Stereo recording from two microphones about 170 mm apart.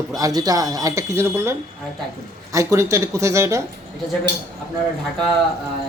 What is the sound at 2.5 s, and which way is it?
Speech, 15° right (ahead or behind).